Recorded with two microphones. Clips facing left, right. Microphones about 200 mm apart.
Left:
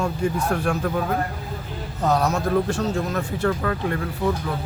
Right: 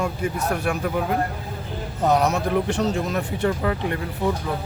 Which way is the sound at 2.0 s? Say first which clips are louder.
Right 1 dB; 20° right (ahead or behind).